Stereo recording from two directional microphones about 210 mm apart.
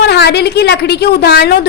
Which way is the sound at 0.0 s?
50° left (ahead or behind).